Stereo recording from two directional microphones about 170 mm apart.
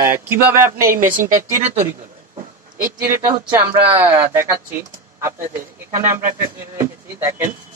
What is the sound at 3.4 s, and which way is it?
Speech, 10° right (ahead or behind).